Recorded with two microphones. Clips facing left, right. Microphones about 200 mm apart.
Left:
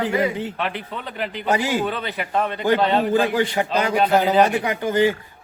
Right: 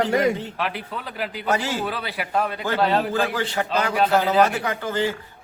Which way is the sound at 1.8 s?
5° right (ahead or behind).